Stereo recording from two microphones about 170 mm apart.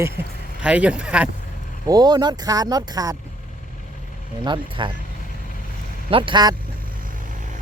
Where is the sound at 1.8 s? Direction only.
20° right (ahead or behind).